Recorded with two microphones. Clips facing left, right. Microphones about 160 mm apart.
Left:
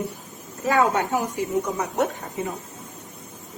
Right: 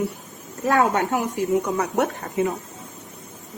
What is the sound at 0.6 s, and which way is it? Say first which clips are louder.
Speech: right 1 dB; 55° right (ahead or behind).